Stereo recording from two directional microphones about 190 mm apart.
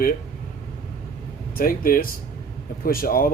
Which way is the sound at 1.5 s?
50° left (ahead or behind).